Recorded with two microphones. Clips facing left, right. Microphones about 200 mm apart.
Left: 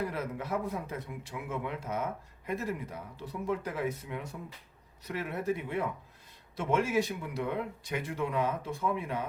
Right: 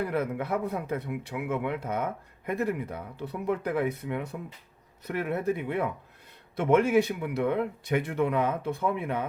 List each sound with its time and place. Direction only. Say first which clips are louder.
0.0 s speech: right 6 dB; 60° right (ahead or behind)